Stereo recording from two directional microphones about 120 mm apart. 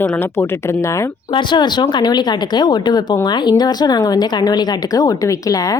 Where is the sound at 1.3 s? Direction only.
40° left (ahead or behind).